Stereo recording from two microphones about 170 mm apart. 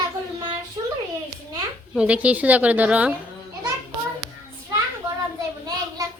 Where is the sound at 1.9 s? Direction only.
5° right (ahead or behind).